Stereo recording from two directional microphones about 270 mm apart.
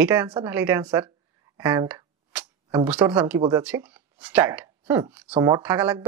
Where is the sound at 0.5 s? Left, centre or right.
Centre.